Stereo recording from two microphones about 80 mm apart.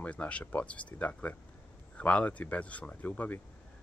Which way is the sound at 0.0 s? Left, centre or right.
Centre.